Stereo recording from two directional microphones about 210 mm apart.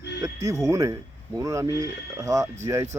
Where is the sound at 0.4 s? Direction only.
15° right (ahead or behind).